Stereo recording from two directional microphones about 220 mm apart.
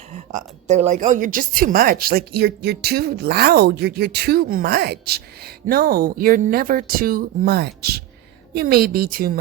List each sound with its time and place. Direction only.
0.3 s a woman's voice: 30° right (ahead or behind)